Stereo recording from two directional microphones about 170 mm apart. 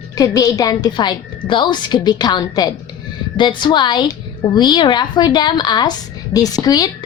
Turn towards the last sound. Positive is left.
turn(degrees=25)  # may be behind; listen again after turning